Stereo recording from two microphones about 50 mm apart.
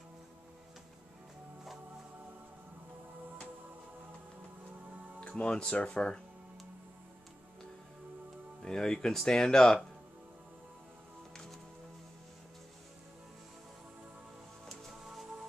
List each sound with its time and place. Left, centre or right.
5.3 s speech: centre
8.6 s speech: centre